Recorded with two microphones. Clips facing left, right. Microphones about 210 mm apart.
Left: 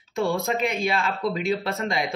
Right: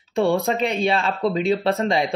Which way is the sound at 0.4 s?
35° right (ahead or behind).